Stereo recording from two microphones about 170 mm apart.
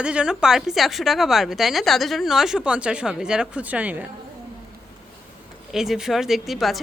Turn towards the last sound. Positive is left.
turn(degrees=0)  # may be behind; listen again after turning